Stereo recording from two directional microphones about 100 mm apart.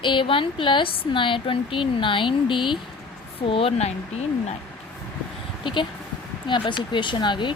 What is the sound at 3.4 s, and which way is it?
Speech, 65° left (ahead or behind).